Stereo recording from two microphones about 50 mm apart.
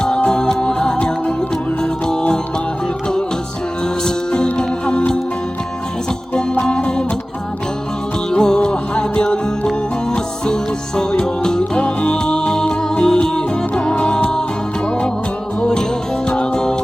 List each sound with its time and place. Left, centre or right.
0.3 s music: centre
4.0 s music: centre
6.3 s music: centre
8.3 s music: centre
16.2 s music: centre